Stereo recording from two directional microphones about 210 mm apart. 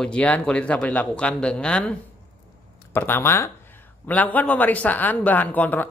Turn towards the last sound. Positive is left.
turn(degrees=10)  # may be behind; listen again after turning